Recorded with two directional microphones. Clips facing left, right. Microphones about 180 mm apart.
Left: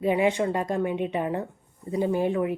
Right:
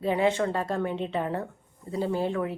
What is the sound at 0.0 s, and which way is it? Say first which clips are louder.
A woman's voice: left 2 dB; 15° left (ahead or behind).